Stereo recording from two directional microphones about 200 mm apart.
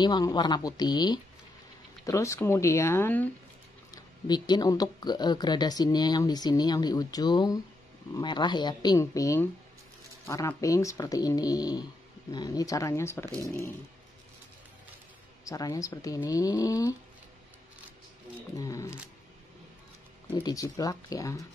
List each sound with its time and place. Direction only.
0.0 s speech: 20° left (ahead or behind)
3.9 s speech: 20° left (ahead or behind)
15.4 s speech: 15° left (ahead or behind)
18.6 s speech: 15° left (ahead or behind)
20.3 s speech: 15° left (ahead or behind)